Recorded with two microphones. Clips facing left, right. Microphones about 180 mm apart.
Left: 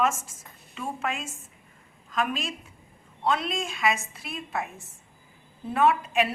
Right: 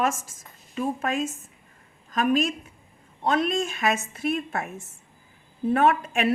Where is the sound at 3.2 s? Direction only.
50° right (ahead or behind).